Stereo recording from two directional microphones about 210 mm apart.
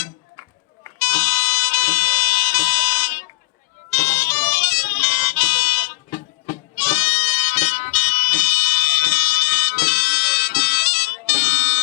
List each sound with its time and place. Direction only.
0.9 s music: 15° left (ahead or behind); by 11.8 s 50° left (ahead or behind)